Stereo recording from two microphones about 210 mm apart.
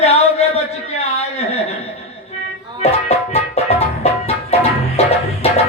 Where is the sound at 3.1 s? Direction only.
30° left (ahead or behind).